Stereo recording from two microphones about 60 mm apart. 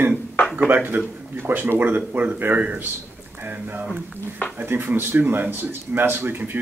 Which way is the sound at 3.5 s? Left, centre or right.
Right.